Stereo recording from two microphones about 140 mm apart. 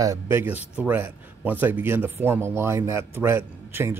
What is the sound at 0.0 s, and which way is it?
A man's voice, 20° right (ahead or behind).